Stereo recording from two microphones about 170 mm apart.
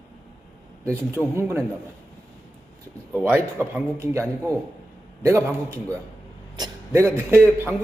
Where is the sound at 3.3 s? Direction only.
15° right (ahead or behind).